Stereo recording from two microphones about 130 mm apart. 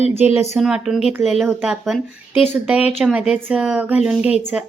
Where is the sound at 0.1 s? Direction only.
15° right (ahead or behind).